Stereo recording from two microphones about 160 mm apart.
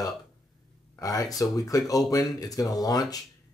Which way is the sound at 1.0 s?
20° left (ahead or behind).